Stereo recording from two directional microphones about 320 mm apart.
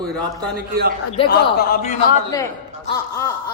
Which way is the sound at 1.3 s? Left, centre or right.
Left.